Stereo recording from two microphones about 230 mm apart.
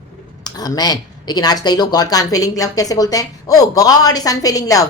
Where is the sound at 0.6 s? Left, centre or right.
Centre.